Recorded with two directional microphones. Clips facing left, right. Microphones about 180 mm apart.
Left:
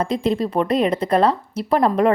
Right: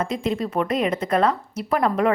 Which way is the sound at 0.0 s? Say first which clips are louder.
Left 4 dB; 35° left (ahead or behind).